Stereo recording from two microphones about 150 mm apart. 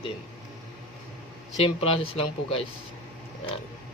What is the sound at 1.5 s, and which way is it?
Speech, 40° left (ahead or behind).